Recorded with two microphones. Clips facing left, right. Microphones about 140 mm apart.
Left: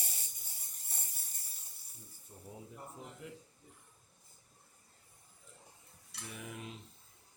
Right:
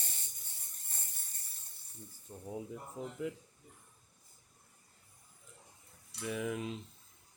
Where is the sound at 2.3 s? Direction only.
90° right.